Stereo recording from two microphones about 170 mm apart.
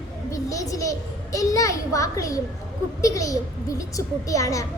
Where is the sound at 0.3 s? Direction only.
20° left (ahead or behind).